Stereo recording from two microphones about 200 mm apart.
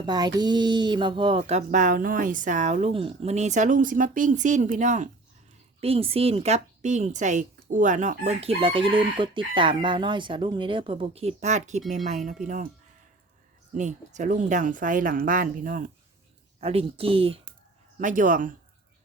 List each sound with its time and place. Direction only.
0.0 s a woman's voice: 20° right (ahead or behind); by 12.4 s 35° right (ahead or behind)
13.7 s speech: 35° right (ahead or behind)
16.6 s a woman's voice: 30° right (ahead or behind)
18.0 s speech: 40° right (ahead or behind)